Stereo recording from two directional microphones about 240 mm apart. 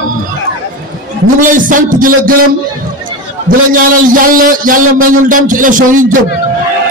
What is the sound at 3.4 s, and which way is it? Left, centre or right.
A man's voice, right.